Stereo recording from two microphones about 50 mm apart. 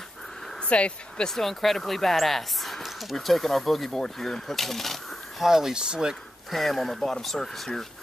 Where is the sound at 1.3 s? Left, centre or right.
Centre.